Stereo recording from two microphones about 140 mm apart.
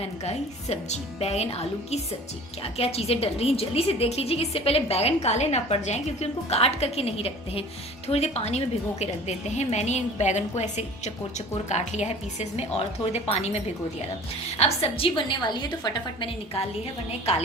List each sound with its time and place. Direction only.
0.0 s a woman's voice: 50° left (ahead or behind)
14.6 s a woman's voice: 45° left (ahead or behind)